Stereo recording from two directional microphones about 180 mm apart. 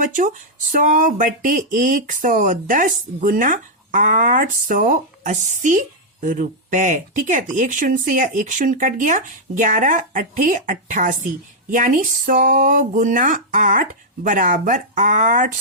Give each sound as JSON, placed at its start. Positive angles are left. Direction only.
{"t": 0.0, "sound": "speech", "side_deg": -45}